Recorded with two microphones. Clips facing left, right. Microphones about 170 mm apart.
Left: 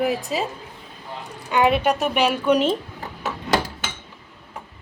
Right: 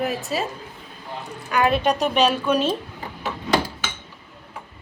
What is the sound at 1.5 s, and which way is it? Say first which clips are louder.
Speech: left 2 dB; 20° left (ahead or behind).